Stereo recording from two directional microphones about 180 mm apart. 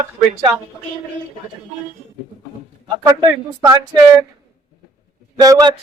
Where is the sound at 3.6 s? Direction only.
20° right (ahead or behind).